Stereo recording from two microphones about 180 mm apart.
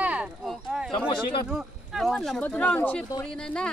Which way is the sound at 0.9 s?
25° left (ahead or behind).